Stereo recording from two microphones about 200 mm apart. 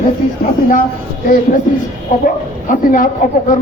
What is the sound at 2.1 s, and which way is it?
Speech, 40° left (ahead or behind).